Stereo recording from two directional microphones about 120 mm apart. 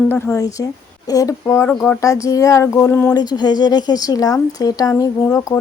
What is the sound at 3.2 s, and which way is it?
Speech, 35° left (ahead or behind).